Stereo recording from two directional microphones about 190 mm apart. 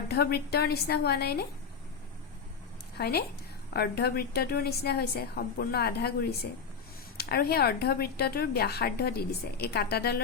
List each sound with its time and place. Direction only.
0.1 s speech: 55° left (ahead or behind)
3.0 s speech: 55° left (ahead or behind)